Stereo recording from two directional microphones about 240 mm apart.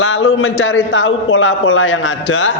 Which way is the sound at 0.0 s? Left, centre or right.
Left.